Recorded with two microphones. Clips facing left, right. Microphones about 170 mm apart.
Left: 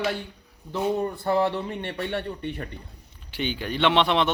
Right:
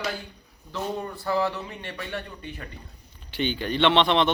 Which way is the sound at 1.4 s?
25° left (ahead or behind).